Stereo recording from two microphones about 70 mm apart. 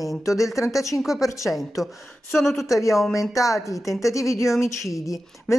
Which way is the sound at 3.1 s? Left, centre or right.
Left.